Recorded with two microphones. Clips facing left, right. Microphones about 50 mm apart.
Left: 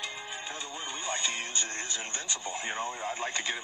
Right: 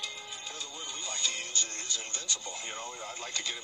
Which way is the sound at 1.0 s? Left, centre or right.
Left.